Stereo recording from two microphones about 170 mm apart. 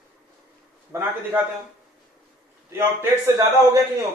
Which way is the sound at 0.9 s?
10° right (ahead or behind).